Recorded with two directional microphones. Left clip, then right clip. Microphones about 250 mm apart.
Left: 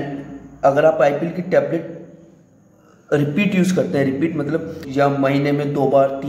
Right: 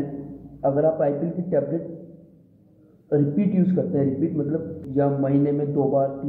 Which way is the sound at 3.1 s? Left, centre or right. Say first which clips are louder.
Left 4 dB; centre.